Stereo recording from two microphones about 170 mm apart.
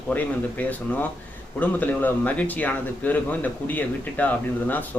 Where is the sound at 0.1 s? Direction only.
10° left (ahead or behind).